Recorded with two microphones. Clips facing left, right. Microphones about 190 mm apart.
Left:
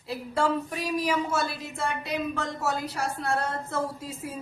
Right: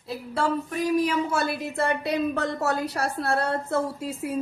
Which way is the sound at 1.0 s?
60° right (ahead or behind).